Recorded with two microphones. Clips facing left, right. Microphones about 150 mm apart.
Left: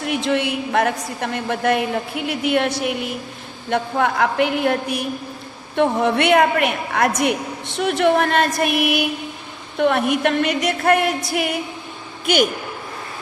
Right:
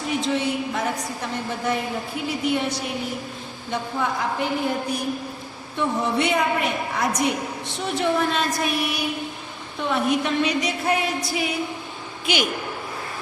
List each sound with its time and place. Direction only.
0.0 s a woman's voice: 65° left (ahead or behind)
12.2 s a man's voice: 50° left (ahead or behind)